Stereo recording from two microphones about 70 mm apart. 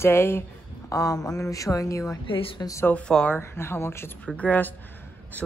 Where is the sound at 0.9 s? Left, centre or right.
Left.